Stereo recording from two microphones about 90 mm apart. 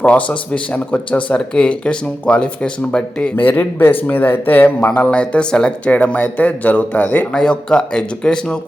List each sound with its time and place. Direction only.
0.0 s speech: 15° left (ahead or behind)